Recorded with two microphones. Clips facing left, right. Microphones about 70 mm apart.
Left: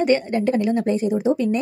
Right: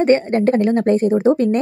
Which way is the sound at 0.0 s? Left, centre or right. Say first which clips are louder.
Right 4 dB; right.